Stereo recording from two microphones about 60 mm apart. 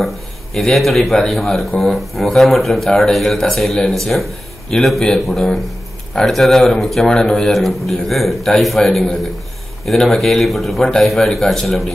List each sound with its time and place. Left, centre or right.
0.6 s a man's voice: centre